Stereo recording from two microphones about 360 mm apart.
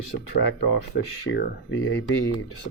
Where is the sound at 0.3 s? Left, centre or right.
Left.